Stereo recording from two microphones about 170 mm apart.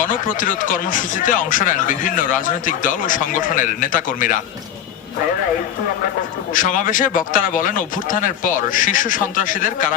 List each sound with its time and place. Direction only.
0.3 s speech: 50° left (ahead or behind)
6.5 s speech: 50° left (ahead or behind)
8.7 s speech: 50° left (ahead or behind)